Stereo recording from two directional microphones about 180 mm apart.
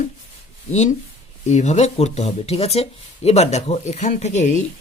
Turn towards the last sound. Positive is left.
turn(degrees=40)  # may be behind; listen again after turning